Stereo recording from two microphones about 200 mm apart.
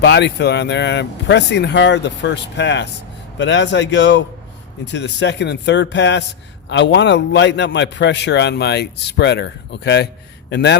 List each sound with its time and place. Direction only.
0.0 s a man's voice: 60° left (ahead or behind)